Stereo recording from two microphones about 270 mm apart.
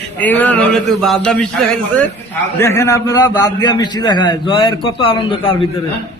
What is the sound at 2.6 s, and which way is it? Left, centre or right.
A man's voice, centre.